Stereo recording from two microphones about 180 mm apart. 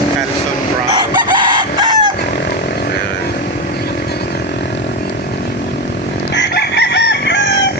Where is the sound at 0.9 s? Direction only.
25° right (ahead or behind).